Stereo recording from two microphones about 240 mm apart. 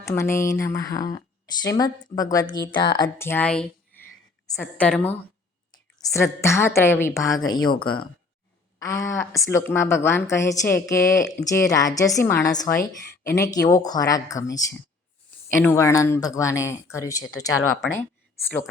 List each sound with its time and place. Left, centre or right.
0.0 s a woman's voice: centre
8.8 s a woman's voice: centre